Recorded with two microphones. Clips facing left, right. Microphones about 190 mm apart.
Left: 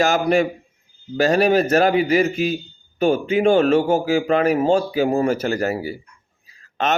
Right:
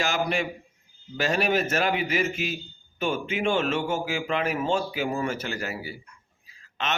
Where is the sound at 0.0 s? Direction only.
40° left (ahead or behind).